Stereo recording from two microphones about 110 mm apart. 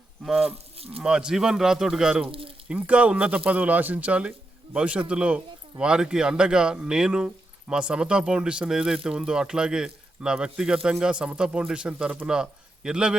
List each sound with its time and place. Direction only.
0.4 s cattle: 65° right (ahead or behind)
1.0 s speech: 5° right (ahead or behind)
2.2 s speech: 55° right (ahead or behind)
2.6 s speech: 10° right (ahead or behind)